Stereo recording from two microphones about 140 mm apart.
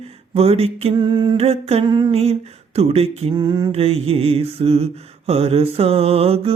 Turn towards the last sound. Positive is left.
turn(degrees=-45)  # may be behind; listen again after turning